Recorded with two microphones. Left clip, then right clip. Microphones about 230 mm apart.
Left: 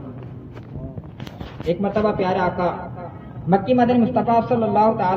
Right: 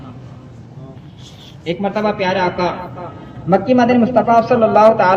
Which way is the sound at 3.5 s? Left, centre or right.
Left.